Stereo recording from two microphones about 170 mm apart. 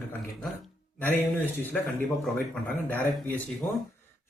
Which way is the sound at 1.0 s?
10° left (ahead or behind).